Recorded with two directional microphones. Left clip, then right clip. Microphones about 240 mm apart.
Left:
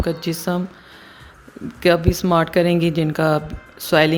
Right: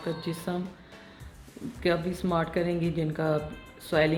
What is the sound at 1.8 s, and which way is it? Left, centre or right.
Speech, left.